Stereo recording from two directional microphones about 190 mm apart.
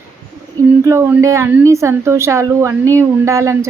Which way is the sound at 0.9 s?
10° right (ahead or behind).